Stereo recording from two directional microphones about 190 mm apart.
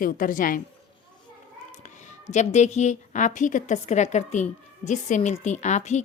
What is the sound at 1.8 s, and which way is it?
A woman's voice, 40° left (ahead or behind).